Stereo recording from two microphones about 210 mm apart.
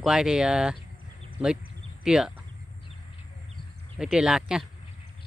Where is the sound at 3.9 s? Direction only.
Centre (ahead or behind).